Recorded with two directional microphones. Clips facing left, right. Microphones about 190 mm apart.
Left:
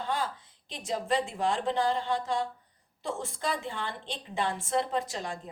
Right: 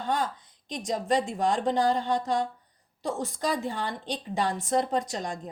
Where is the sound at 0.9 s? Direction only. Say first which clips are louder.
Right 3 dB; 35° right (ahead or behind).